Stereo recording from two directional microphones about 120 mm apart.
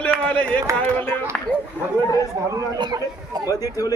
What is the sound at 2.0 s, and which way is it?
Speech, 25° left (ahead or behind).